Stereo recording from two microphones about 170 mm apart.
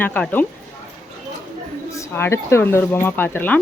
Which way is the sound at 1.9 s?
15° left (ahead or behind).